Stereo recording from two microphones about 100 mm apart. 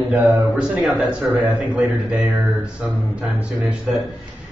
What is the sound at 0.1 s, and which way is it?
A man's voice, 15° right (ahead or behind).